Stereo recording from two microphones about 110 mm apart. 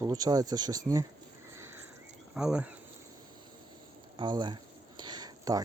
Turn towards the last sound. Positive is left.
turn(degrees=-35)  # may be behind; listen again after turning